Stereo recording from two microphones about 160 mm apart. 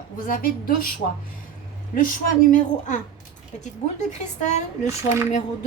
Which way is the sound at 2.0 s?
55° left (ahead or behind).